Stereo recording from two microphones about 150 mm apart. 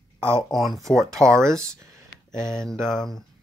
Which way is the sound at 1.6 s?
20° right (ahead or behind).